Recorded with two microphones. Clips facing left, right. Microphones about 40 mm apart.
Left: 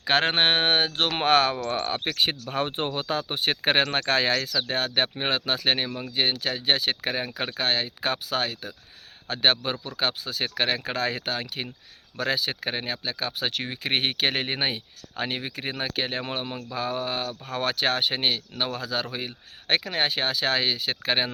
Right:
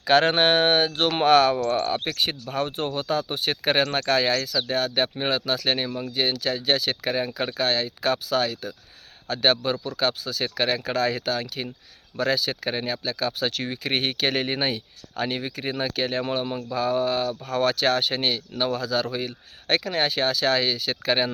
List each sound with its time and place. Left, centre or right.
0.0 s speech: left